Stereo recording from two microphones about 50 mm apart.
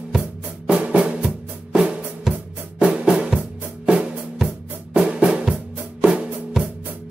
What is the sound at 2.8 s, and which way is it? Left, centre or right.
Drum, centre.